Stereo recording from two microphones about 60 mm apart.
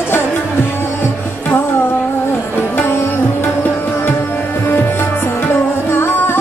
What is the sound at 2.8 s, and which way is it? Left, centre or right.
Sitar, left.